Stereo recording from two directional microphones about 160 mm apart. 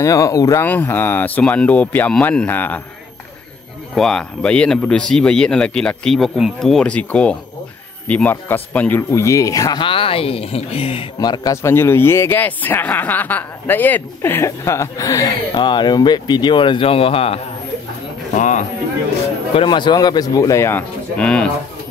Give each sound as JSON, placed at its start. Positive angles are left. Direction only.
{"t": 0.0, "sound": "a man's voice", "side_deg": 20}
{"t": 3.9, "sound": "a man's voice", "side_deg": 5}
{"t": 11.1, "sound": "a man's voice", "side_deg": 25}
{"t": 18.3, "sound": "speech", "side_deg": 50}
{"t": 19.5, "sound": "speech", "side_deg": 30}